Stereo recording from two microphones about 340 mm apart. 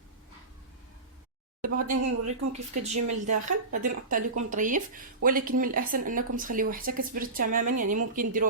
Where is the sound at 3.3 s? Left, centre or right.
Right.